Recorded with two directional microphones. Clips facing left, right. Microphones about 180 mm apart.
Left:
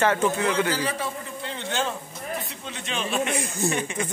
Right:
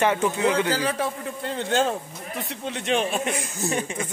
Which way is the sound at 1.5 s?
45° right (ahead or behind).